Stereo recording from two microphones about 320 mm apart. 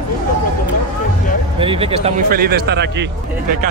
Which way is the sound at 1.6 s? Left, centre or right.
Centre.